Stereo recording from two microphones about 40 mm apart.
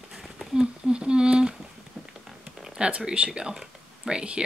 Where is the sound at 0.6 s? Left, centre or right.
Right.